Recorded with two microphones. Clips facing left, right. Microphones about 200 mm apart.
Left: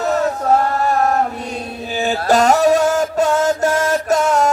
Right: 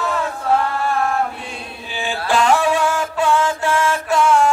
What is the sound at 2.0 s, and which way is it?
Mantra, 40° left (ahead or behind).